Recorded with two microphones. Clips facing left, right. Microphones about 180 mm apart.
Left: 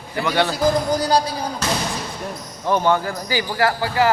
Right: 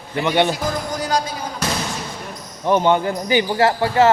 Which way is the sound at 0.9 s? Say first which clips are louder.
Left 3 dB; 35° left (ahead or behind).